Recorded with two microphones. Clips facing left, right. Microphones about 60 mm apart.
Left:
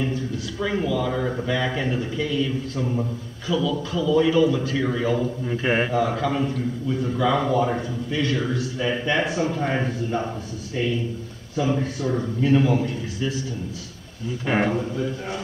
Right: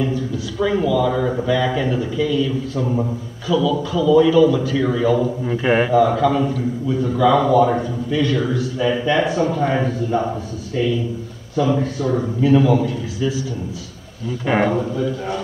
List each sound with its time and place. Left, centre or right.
0.0 s a man's voice: centre
2.7 s a man's voice: centre
3.4 s speech: centre
5.4 s a man's voice: centre
5.7 s speech: centre
11.7 s speech: centre
14.4 s speech: centre